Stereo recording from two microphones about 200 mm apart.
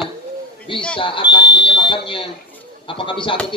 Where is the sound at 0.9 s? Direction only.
25° left (ahead or behind).